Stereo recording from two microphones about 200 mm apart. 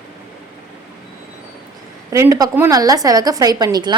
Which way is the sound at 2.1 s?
15° right (ahead or behind).